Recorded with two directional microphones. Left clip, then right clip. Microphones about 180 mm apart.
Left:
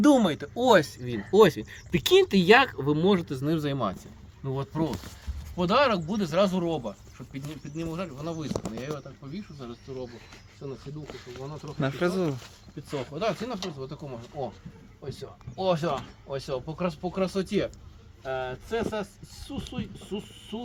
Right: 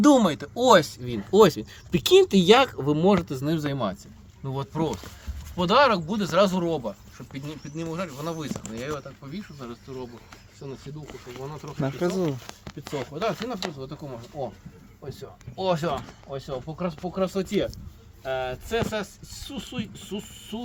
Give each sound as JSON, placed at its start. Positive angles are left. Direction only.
{"t": 0.0, "sound": "speech", "side_deg": -20}
{"t": 10.6, "sound": "speech", "side_deg": -30}
{"t": 11.6, "sound": "speech", "side_deg": -10}
{"t": 15.0, "sound": "speech", "side_deg": 0}
{"t": 15.5, "sound": "speech", "side_deg": -15}
{"t": 16.0, "sound": "speech", "side_deg": 0}
{"t": 18.3, "sound": "speech", "side_deg": -20}